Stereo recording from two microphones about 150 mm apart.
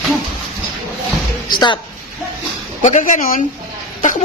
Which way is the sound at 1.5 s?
30° left (ahead or behind).